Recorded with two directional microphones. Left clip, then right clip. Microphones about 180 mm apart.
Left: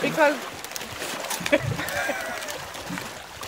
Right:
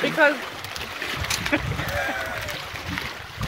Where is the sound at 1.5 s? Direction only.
65° left (ahead or behind).